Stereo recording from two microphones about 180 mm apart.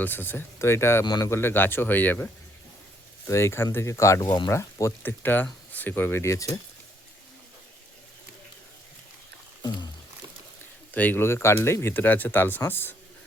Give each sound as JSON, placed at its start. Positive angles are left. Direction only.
{"t": 0.0, "sound": "speech", "side_deg": 10}
{"t": 10.9, "sound": "speech", "side_deg": 10}